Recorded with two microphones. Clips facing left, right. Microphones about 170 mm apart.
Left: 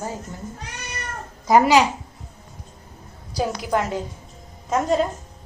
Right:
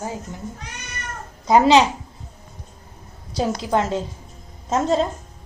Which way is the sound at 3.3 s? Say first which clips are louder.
Right 2 dB; 25° right (ahead or behind).